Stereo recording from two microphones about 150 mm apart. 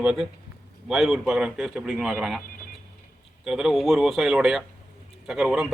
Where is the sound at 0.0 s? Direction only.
5° right (ahead or behind).